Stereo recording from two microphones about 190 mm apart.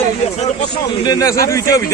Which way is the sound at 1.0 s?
20° left (ahead or behind).